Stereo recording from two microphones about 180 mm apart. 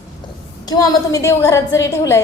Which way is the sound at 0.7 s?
20° left (ahead or behind).